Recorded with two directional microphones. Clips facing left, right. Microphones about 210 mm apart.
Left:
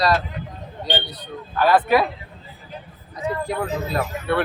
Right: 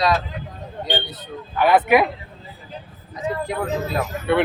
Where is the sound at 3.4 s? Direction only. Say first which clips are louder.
Right 1 dB; centre (ahead or behind).